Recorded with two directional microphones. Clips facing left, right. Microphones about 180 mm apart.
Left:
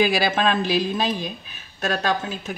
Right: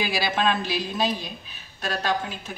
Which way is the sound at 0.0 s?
50° left (ahead or behind).